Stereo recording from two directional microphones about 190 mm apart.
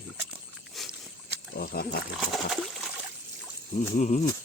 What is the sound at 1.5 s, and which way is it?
Speech, 55° left (ahead or behind).